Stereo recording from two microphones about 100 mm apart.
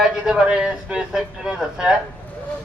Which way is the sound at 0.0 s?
10° right (ahead or behind).